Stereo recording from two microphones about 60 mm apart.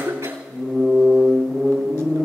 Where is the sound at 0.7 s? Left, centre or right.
Centre.